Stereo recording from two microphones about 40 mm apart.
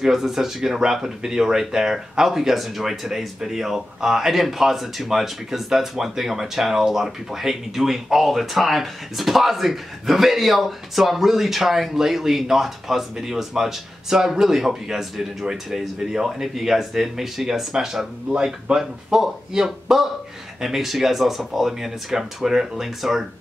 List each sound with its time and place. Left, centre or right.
0.0 s speech: centre